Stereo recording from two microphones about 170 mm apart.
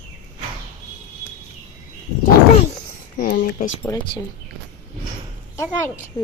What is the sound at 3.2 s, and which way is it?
Speech, 55° left (ahead or behind).